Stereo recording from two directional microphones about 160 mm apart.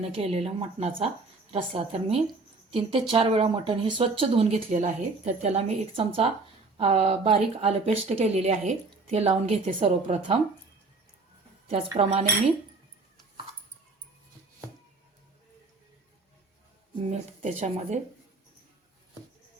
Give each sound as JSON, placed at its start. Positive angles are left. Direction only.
{"t": 0.2, "sound": "speech", "side_deg": -40}
{"t": 11.7, "sound": "speech", "side_deg": -40}
{"t": 17.1, "sound": "speech", "side_deg": -45}